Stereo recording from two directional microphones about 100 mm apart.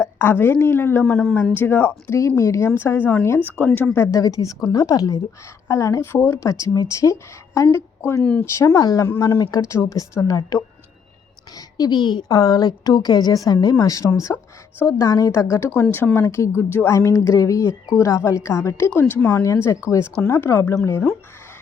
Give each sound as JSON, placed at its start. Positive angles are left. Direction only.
{"t": 0.0, "sound": "speech", "side_deg": 20}
{"t": 4.2, "sound": "a woman's voice", "side_deg": 35}
{"t": 8.2, "sound": "speech", "side_deg": 10}
{"t": 8.5, "sound": "a woman's voice", "side_deg": 35}
{"t": 15.8, "sound": "speech", "side_deg": 20}